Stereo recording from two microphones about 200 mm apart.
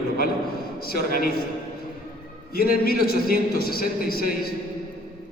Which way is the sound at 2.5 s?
50° left (ahead or behind).